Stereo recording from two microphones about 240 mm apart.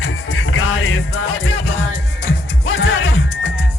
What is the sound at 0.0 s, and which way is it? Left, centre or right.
Music, left.